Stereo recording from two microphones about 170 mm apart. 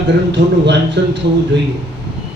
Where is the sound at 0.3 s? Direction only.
90° right.